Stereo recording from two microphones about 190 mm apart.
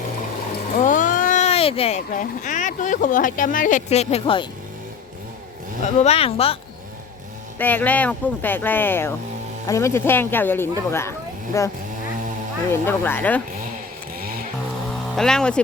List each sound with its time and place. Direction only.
0.9 s a sound: 45° left (ahead or behind)
2.1 s speech: 40° left (ahead or behind)
6.0 s speech: 30° left (ahead or behind)
7.6 s speech: 10° left (ahead or behind)
12.7 s speech: 10° left (ahead or behind)
14.2 s a sound: 50° right (ahead or behind)
15.1 s speech: 5° left (ahead or behind)